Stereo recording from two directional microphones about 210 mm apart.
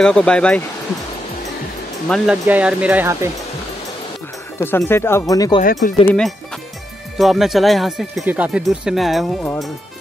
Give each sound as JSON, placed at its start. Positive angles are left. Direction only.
{"t": 0.0, "sound": "speech", "side_deg": 5}
{"t": 2.0, "sound": "speech", "side_deg": 0}
{"t": 4.6, "sound": "speech", "side_deg": 10}
{"t": 5.6, "sound": "speech", "side_deg": 40}
{"t": 6.0, "sound": "speech", "side_deg": 5}